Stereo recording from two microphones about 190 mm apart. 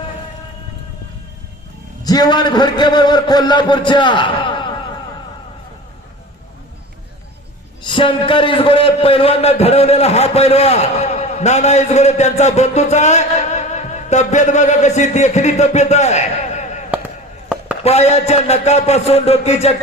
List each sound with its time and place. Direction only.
2.0 s speech: 20° left (ahead or behind)
7.9 s a man's voice: 25° left (ahead or behind)
17.8 s a man's voice: 35° left (ahead or behind)